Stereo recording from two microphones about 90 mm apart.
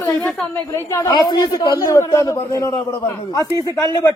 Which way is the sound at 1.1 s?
50° left (ahead or behind).